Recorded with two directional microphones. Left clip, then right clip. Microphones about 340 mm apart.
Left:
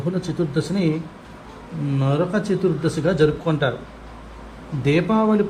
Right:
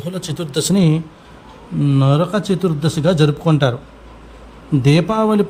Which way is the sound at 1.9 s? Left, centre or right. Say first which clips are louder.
Right 4 dB; right.